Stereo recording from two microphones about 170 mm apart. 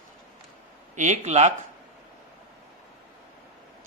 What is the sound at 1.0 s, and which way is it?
Speech, 45° right (ahead or behind).